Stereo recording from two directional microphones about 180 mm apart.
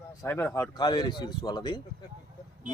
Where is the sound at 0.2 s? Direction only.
15° left (ahead or behind).